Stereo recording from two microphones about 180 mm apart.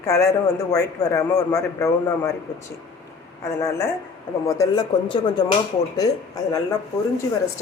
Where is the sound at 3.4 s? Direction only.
15° left (ahead or behind).